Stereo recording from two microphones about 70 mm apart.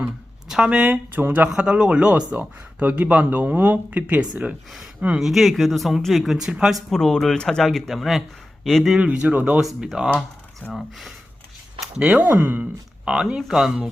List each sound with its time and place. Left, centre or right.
0.4 s speech: centre
1.1 s speech: right
1.5 s speech: centre
4.7 s speech: centre
6.9 s speech: centre
9.0 s speech: centre
9.6 s speech: centre
10.7 s speech: centre
11.8 s a sound: centre
12.1 s speech: right
13.1 s speech: centre